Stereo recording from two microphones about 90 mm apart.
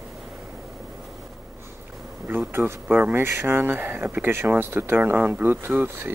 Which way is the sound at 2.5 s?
25° right (ahead or behind).